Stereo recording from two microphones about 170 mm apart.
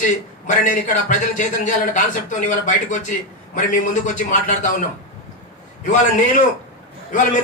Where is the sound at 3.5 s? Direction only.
50° left (ahead or behind).